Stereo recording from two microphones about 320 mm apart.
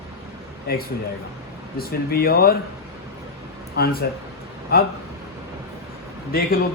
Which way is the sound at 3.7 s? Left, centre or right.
Left.